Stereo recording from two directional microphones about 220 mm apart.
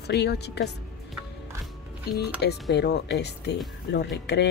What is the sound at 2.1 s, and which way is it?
Speech, 45° left (ahead or behind).